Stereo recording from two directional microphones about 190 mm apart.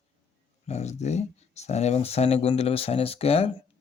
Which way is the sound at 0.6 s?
35° left (ahead or behind).